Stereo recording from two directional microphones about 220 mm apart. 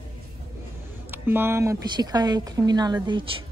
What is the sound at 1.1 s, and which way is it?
A woman's voice, 10° right (ahead or behind).